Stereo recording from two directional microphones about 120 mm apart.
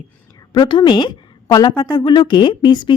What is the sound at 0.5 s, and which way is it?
A woman's voice, 40° left (ahead or behind).